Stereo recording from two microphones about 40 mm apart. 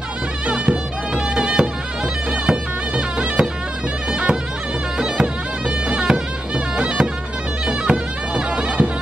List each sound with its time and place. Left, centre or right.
0.5 s music: right
4.1 s bagpipes: right
4.9 s music: right
5.9 s bagpipes: right